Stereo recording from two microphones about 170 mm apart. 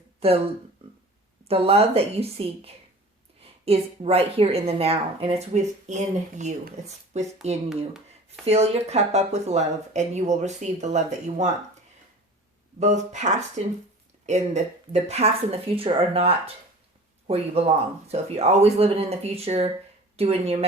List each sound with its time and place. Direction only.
0.2 s speech: 35° right (ahead or behind)
1.5 s a woman's voice: 35° right (ahead or behind)
8.4 s a woman's voice: 40° right (ahead or behind)
12.8 s a woman's voice: 45° right (ahead or behind)